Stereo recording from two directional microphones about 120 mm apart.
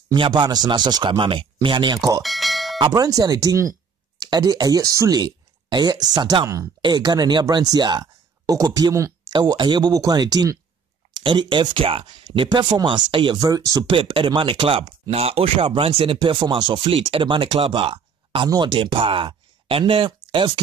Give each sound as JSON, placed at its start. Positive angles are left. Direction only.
{"t": 0.1, "sound": "speech", "side_deg": -40}
{"t": 2.2, "sound": "bell", "side_deg": 0}
{"t": 2.8, "sound": "speech", "side_deg": -30}
{"t": 12.3, "sound": "speech", "side_deg": -35}
{"t": 13.4, "sound": "speech", "side_deg": -30}
{"t": 13.9, "sound": "speech", "side_deg": -45}